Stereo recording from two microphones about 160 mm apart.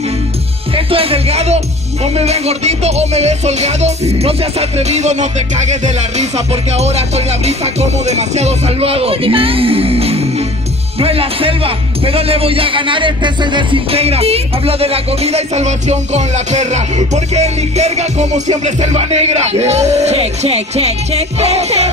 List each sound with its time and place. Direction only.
0.7 s music: 35° right (ahead or behind)
2.1 s speech: 40° right (ahead or behind)